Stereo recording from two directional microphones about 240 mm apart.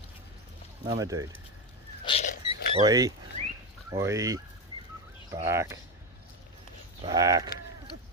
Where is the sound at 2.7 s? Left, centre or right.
Centre.